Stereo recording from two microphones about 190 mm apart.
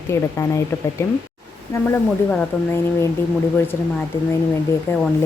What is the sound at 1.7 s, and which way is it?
Speech, 15° left (ahead or behind).